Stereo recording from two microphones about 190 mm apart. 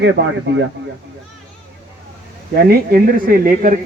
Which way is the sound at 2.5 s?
50° right (ahead or behind).